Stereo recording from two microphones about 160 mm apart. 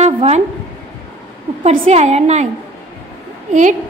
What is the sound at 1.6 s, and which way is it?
Speech, 40° right (ahead or behind).